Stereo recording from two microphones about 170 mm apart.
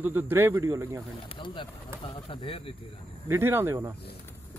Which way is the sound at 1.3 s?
30° left (ahead or behind).